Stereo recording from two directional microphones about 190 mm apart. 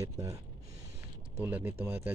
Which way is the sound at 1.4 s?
10° right (ahead or behind).